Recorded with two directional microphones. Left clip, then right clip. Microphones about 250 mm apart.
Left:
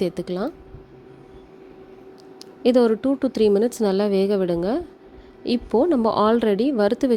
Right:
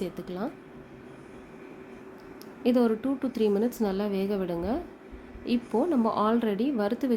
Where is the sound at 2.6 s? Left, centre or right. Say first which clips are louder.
Left 8 dB; left.